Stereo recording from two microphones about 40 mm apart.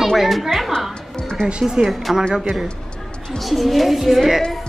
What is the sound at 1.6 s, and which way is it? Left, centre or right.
Speech, centre.